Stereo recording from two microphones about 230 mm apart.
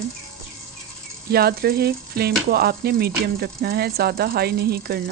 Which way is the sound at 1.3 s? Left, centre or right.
Right.